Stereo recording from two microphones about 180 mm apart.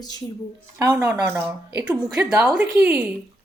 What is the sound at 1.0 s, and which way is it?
Speech, 10° right (ahead or behind).